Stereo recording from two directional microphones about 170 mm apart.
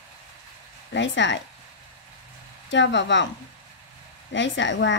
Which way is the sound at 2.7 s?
90° left.